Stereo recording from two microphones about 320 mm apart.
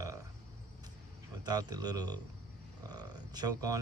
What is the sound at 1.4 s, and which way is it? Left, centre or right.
Speech, centre.